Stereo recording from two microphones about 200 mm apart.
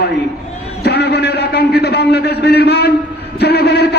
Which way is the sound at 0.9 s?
55° left (ahead or behind).